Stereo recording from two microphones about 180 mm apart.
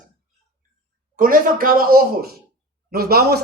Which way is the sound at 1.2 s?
50° right (ahead or behind).